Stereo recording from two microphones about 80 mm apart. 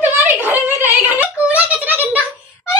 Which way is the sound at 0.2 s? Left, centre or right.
Right.